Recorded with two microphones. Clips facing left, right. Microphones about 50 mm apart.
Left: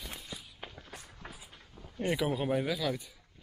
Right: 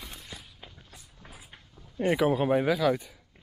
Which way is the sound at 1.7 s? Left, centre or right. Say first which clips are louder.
Even; left.